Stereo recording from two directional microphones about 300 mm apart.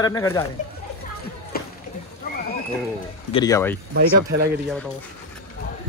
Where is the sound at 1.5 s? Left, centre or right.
Left.